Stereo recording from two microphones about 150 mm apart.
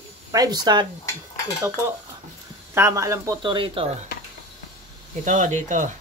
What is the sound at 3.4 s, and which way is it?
Speech, 35° right (ahead or behind).